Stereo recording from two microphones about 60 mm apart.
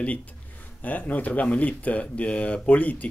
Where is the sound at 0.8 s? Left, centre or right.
Left.